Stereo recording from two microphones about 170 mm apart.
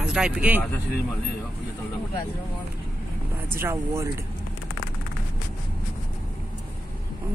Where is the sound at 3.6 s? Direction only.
15° right (ahead or behind).